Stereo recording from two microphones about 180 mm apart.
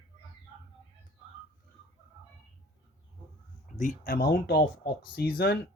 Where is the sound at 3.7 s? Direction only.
45° left (ahead or behind).